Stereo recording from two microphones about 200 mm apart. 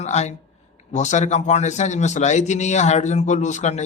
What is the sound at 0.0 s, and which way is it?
A man's voice, 35° left (ahead or behind).